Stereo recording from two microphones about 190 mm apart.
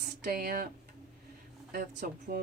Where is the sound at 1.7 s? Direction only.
50° right (ahead or behind).